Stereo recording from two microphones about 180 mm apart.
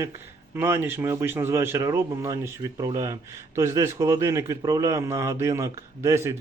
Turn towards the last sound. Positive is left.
turn(degrees=-15)  # may be behind; listen again after turning